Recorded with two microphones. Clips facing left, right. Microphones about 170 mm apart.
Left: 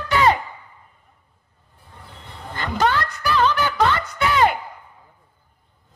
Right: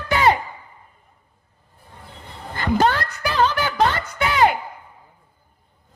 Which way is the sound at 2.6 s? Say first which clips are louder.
Right 2 dB; 40° right (ahead or behind).